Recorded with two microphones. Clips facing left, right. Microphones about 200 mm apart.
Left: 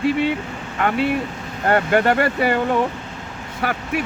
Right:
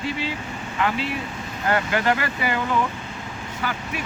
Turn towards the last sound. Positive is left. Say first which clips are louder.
# left 5 dB
turn(degrees=65)  # may be behind; listen again after turning